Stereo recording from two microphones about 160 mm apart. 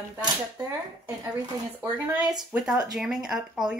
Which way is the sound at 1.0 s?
25° right (ahead or behind).